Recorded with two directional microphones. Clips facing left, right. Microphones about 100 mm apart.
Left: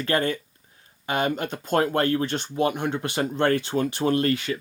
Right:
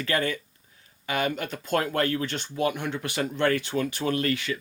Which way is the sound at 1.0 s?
25° left (ahead or behind).